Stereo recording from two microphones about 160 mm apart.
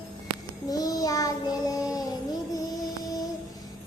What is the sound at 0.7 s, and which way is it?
Child singing, 25° left (ahead or behind).